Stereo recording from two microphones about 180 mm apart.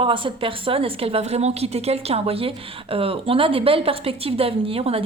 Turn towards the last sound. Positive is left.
turn(degrees=-35)  # may be behind; listen again after turning